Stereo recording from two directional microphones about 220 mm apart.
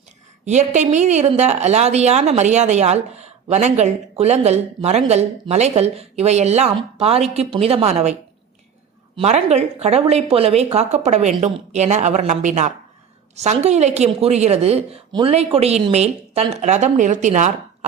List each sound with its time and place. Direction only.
0.4 s a woman's voice: 30° right (ahead or behind)
9.1 s a woman's voice: 30° right (ahead or behind)